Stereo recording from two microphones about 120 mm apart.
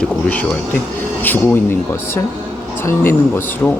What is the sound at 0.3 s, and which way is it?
Speech, 10° left (ahead or behind).